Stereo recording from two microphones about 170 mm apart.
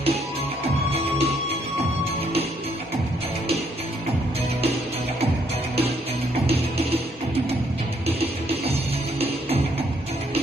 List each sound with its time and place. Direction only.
0.9 s music: 35° right (ahead or behind)
6.5 s music: 35° right (ahead or behind)
8.0 s music: 35° right (ahead or behind)